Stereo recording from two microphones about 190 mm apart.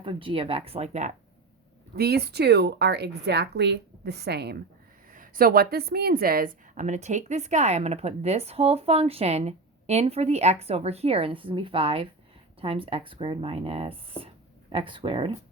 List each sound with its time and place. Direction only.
0.0 s speech: 30° right (ahead or behind)
2.0 s a woman's voice: 55° right (ahead or behind)
5.1 s speech: 45° right (ahead or behind); by 15.3 s 25° right (ahead or behind)